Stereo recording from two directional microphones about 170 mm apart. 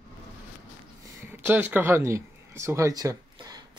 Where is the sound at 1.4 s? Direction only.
10° right (ahead or behind).